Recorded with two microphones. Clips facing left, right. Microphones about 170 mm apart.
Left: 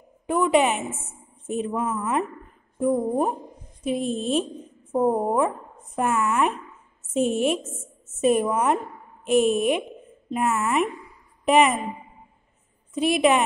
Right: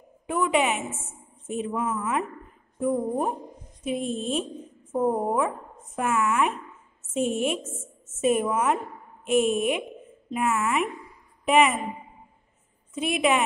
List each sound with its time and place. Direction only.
0.3 s a woman's voice: 35° left (ahead or behind)
12.9 s a woman's voice: 35° left (ahead or behind)